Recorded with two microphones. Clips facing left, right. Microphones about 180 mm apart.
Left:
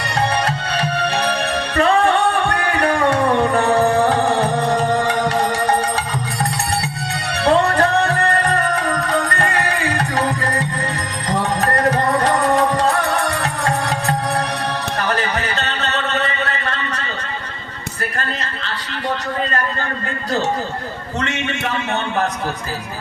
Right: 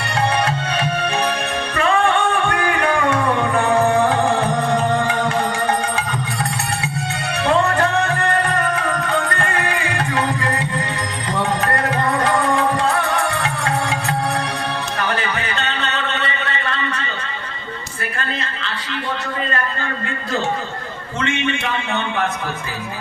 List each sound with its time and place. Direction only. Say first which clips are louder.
0.4 s music: even; 35° left (ahead or behind)
5.0 s music: left 2 dB; 35° left (ahead or behind)
7.3 s music: left 2 dB; 35° left (ahead or behind)
9.4 s music: left 2 dB; 40° left (ahead or behind)
14.9 s a sound: left 2 dB; 40° left (ahead or behind)
21.2 s a sound: right 2 dB; 40° left (ahead or behind)